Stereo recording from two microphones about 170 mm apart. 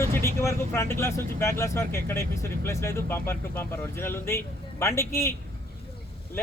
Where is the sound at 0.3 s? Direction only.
15° left (ahead or behind).